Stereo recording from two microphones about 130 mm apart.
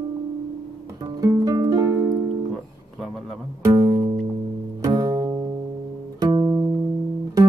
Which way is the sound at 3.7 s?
25° right (ahead or behind).